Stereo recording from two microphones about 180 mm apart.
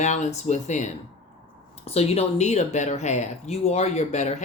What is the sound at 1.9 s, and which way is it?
Speech, 35° left (ahead or behind).